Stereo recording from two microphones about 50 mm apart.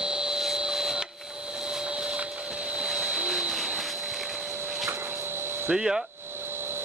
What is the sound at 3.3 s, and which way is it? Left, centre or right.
Jet engine, centre.